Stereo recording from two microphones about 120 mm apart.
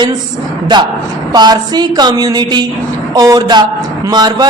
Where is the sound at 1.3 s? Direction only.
35° right (ahead or behind).